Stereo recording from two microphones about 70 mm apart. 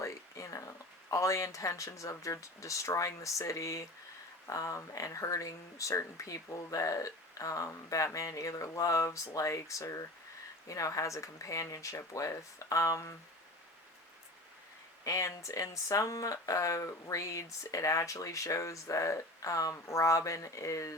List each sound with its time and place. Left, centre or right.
0.0 s a sound: left
1.1 s speech: left
15.0 s speech: left